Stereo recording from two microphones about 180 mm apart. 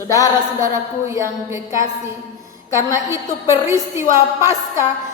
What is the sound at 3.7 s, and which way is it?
Speech, 15° right (ahead or behind).